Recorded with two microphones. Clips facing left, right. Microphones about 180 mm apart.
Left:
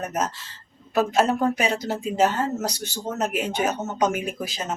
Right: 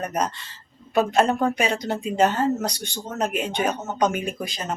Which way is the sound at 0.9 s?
5° left (ahead or behind).